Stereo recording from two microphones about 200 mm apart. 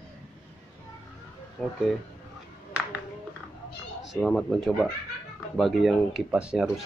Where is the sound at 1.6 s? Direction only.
Centre (ahead or behind).